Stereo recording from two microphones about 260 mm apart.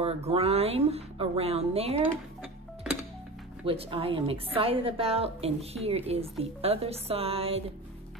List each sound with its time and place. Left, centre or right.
0.0 s speech: right
3.6 s speech: right